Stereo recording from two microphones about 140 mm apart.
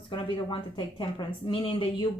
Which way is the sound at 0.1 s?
35° left (ahead or behind).